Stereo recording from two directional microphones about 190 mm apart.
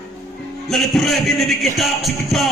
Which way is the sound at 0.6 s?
Centre (ahead or behind).